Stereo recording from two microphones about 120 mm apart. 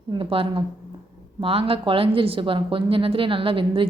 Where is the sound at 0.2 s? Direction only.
45° right (ahead or behind).